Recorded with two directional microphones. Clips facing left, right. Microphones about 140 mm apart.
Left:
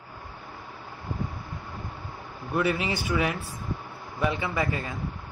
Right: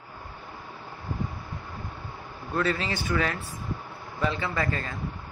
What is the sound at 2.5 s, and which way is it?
Speech, 15° left (ahead or behind).